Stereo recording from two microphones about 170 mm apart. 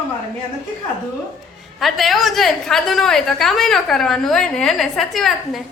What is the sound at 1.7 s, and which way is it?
A woman's voice, centre (ahead or behind).